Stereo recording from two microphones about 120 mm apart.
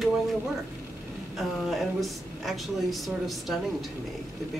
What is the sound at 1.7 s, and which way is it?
A woman's voice, centre (ahead or behind).